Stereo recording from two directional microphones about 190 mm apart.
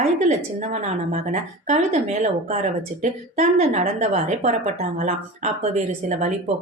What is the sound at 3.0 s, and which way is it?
A woman's voice, 35° right (ahead or behind).